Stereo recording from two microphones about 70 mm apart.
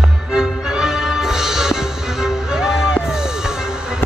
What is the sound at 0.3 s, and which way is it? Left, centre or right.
Music, centre.